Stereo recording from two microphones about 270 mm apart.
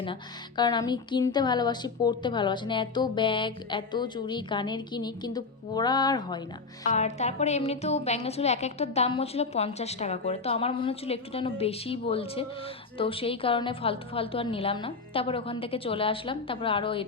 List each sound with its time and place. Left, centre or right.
0.0 s a woman's voice: centre